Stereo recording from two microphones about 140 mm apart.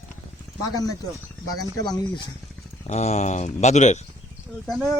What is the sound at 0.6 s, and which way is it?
Speech, 25° left (ahead or behind).